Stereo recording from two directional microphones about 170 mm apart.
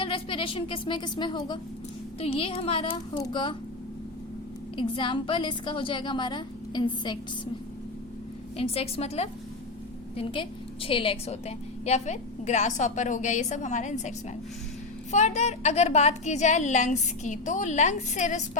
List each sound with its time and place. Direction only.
0.0 s a woman's voice: 30° left (ahead or behind)
4.8 s a woman's voice: 30° left (ahead or behind)
8.5 s speech: 35° left (ahead or behind)
10.8 s a woman's voice: 30° left (ahead or behind)
15.1 s a woman's voice: 40° left (ahead or behind)